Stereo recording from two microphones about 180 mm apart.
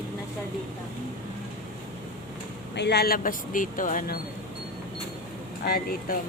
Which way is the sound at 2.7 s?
70° left (ahead or behind).